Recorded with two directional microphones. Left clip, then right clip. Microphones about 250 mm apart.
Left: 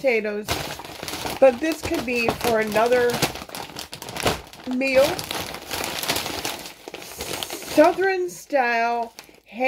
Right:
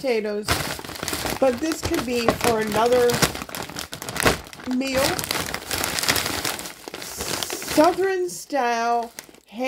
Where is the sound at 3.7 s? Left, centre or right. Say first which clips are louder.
Right 3 dB; right.